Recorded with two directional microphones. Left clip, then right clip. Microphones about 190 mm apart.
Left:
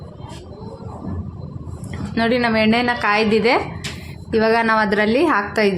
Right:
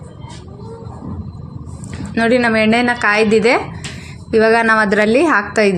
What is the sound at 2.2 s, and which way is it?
A woman's voice, 20° right (ahead or behind).